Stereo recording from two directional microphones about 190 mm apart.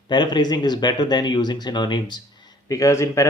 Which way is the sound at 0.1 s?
25° left (ahead or behind).